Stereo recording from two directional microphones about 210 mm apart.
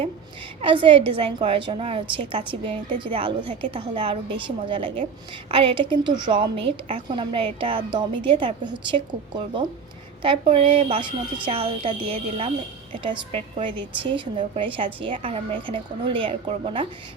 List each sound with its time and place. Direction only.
0.6 s a woman's voice: 25° right (ahead or behind)